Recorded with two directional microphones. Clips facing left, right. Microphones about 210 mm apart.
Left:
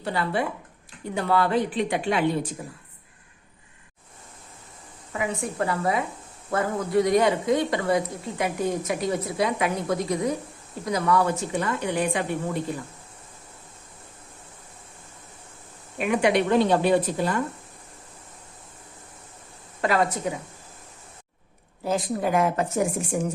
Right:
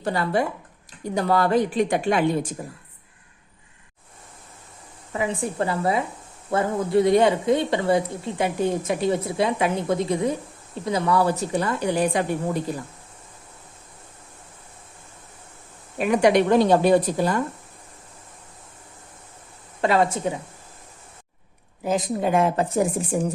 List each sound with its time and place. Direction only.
0.0 s a woman's voice: 40° right (ahead or behind)
5.1 s speech: 30° right (ahead or behind)
16.0 s speech: 40° right (ahead or behind)
19.8 s speech: 25° right (ahead or behind)
21.8 s speech: 20° right (ahead or behind)